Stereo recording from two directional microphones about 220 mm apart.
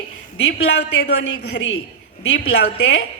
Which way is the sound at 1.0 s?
50° left (ahead or behind).